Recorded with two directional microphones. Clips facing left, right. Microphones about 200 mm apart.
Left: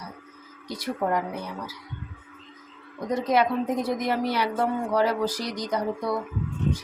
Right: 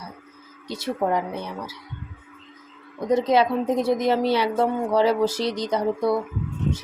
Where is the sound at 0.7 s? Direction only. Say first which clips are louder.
Right 3 dB; 25° right (ahead or behind).